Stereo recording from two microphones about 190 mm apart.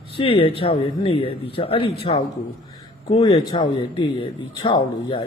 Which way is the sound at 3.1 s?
25° left (ahead or behind).